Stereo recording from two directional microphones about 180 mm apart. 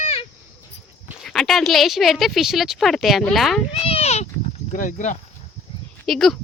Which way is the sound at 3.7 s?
35° left (ahead or behind).